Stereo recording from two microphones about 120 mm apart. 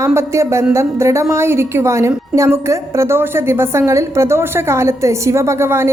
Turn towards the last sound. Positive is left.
turn(degrees=-20)  # may be behind; listen again after turning